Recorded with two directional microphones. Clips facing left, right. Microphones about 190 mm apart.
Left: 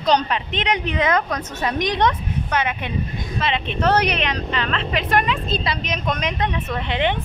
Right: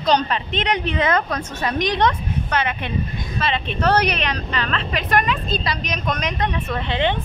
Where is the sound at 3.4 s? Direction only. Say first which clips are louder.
Even; 20° left (ahead or behind).